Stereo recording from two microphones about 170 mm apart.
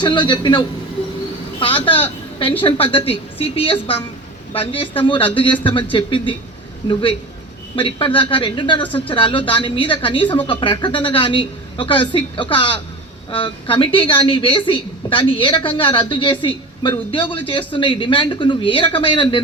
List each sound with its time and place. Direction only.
0.0 s a woman's voice: 25° left (ahead or behind)
1.6 s a woman's voice: 30° left (ahead or behind)
7.8 s a woman's voice: 30° left (ahead or behind)